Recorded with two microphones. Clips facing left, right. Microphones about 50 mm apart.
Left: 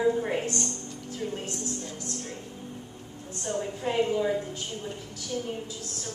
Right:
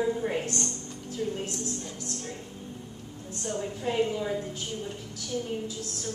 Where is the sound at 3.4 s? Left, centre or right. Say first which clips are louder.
Left 1 dB; centre.